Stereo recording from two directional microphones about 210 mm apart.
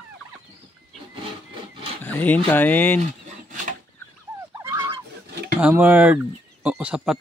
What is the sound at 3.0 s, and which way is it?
Pant, 35° right (ahead or behind).